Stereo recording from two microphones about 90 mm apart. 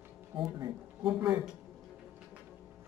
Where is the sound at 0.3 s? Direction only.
65° right (ahead or behind).